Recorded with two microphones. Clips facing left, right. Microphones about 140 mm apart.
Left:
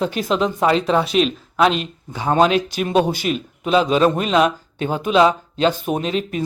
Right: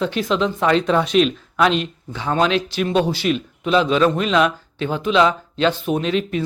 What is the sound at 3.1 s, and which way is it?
Speech, 45° left (ahead or behind).